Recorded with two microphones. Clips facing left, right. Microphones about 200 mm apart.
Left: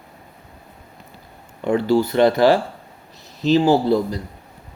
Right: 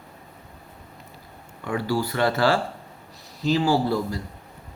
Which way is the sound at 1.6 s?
25° left (ahead or behind).